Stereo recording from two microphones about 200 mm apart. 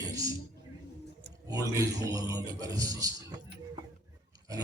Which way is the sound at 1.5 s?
20° right (ahead or behind).